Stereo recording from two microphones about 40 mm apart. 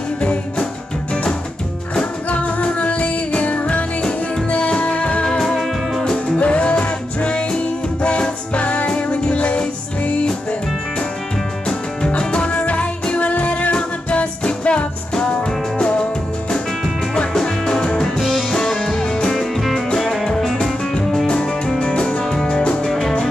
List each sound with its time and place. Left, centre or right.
2.2 s music: left
5.4 s music: centre
6.4 s music: left
12.2 s music: left
17.3 s music: centre
18.5 s music: centre
21.3 s music: left; by 23.1 s centre